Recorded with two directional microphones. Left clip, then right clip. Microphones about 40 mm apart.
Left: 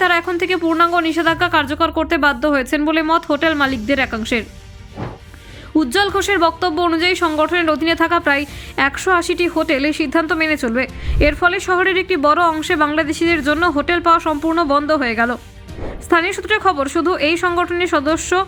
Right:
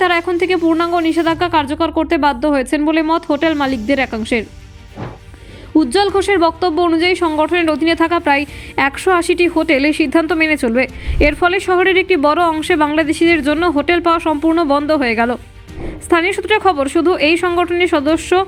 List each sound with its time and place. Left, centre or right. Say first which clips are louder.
0.0 s speech: right 1 dB; right
5.7 s speech: right 3 dB; centre
8.7 s a woman's voice: right 2 dB; right